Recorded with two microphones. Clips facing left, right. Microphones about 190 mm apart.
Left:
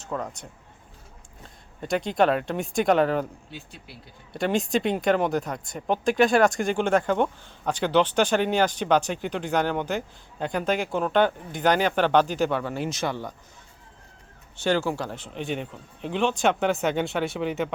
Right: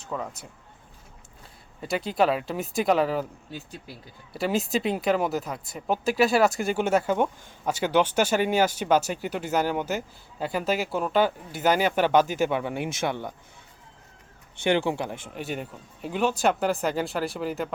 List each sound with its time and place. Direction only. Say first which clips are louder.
0.0 s speech: left 1 dB; centre (ahead or behind)
1.8 s speech: left 2 dB; 5° right (ahead or behind)
3.5 s speech: right 3 dB; 40° right (ahead or behind)
4.3 s speech: left 2 dB; 5° right (ahead or behind); by 13.3 s 20° right (ahead or behind)
14.6 s speech: right 1 dB; 15° right (ahead or behind); by 17.7 s centre (ahead or behind)